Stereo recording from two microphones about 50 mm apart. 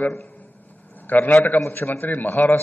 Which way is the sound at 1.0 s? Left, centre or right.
Left.